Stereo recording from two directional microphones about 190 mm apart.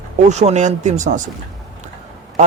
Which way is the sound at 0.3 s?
35° right (ahead or behind).